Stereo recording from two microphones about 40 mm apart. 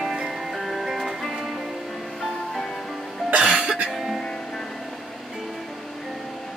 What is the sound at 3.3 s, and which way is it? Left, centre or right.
Music, right.